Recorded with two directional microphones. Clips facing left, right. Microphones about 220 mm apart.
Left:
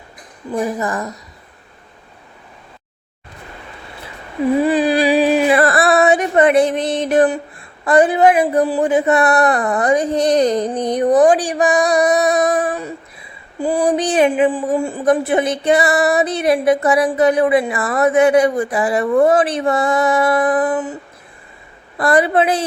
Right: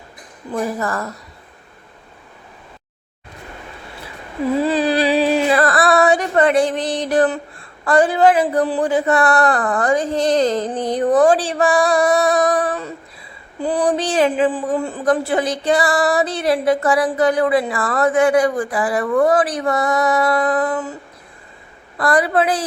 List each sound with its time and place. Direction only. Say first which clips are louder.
0.5 s a woman's voice: left 2 dB; 15° left (ahead or behind)
4.5 s a sound: left 2 dB; 15° left (ahead or behind)
7.9 s a man's voice: left 2 dB; 20° left (ahead or behind)
21.9 s a man's voice: left 2 dB; 25° left (ahead or behind)